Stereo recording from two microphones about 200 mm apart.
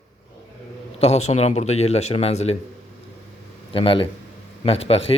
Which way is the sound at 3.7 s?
25° left (ahead or behind).